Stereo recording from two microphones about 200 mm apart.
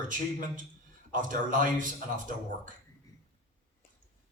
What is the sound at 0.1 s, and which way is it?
Speech, 40° right (ahead or behind).